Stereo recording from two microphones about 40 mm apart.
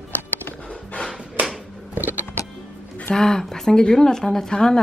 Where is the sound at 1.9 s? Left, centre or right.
Right.